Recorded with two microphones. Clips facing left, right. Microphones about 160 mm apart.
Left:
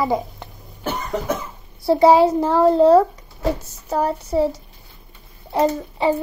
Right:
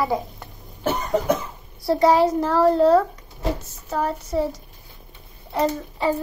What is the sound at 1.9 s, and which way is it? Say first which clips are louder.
A child's voice: left 4 dB; 30° left (ahead or behind).